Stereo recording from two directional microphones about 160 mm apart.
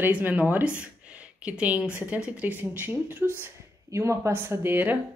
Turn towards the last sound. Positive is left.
turn(degrees=-10)  # may be behind; listen again after turning